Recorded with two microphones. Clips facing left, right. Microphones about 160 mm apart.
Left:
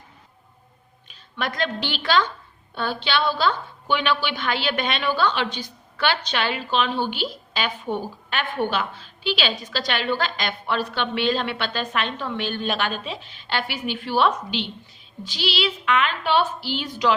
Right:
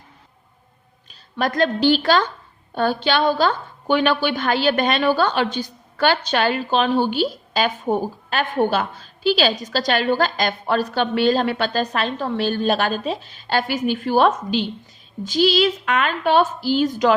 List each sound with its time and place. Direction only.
1.4 s a woman's voice: 40° right (ahead or behind)